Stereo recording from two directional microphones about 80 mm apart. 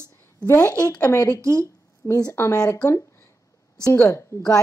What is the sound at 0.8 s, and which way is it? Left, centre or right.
A woman's voice, left.